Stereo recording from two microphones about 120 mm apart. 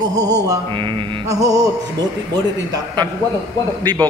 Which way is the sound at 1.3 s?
30° right (ahead or behind).